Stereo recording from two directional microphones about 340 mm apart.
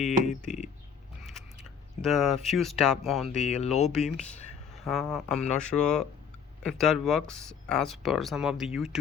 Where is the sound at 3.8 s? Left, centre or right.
Centre.